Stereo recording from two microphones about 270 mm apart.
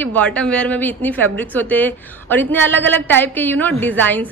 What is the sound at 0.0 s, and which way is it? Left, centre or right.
A man's voice, centre.